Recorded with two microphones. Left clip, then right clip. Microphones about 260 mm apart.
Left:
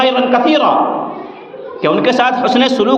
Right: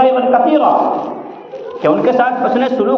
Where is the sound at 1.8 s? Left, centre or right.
Left.